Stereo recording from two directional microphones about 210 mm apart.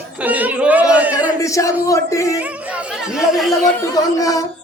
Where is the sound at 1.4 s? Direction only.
15° left (ahead or behind).